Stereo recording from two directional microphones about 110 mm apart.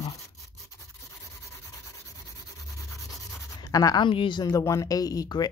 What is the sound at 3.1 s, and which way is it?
Writing, 30° left (ahead or behind).